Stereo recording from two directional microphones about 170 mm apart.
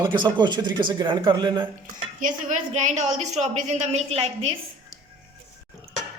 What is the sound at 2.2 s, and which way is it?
A woman's voice, 45° right (ahead or behind).